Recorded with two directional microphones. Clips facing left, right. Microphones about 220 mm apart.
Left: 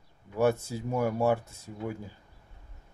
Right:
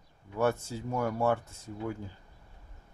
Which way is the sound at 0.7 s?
10° left (ahead or behind).